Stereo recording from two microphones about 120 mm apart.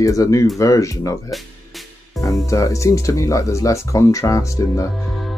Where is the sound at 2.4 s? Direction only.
25° left (ahead or behind).